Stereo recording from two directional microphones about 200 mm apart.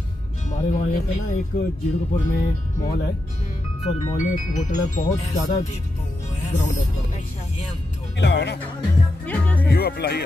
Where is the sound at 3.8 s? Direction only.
35° left (ahead or behind).